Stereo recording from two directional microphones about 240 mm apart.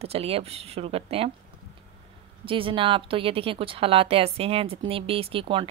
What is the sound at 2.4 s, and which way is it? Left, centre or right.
Speech, right.